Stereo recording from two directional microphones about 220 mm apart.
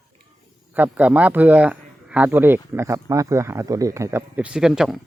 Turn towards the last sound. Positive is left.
turn(degrees=0)  # may be behind; listen again after turning